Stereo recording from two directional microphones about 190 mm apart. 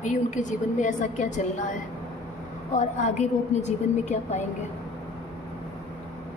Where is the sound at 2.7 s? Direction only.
40° left (ahead or behind).